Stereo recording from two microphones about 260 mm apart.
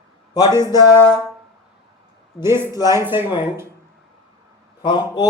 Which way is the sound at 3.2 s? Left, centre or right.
Centre.